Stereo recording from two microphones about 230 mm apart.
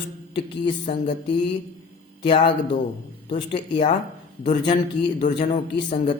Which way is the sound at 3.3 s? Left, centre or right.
Left.